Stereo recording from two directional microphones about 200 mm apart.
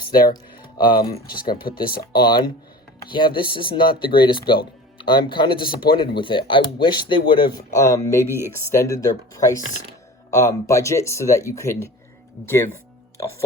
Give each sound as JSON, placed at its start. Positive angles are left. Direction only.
{"t": 0.2, "sound": "speech", "side_deg": 20}
{"t": 1.6, "sound": "speech", "side_deg": 50}
{"t": 2.1, "sound": "speech", "side_deg": 20}
{"t": 5.6, "sound": "speech", "side_deg": 50}
{"t": 6.1, "sound": "speech", "side_deg": 25}